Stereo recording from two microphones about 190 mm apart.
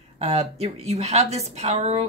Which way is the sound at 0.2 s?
35° right (ahead or behind).